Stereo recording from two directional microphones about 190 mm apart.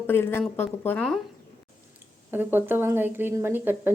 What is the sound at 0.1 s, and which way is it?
A woman's voice, 10° left (ahead or behind).